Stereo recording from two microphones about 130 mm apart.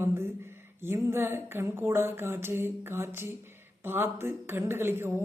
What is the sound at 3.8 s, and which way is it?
Speech, 15° right (ahead or behind).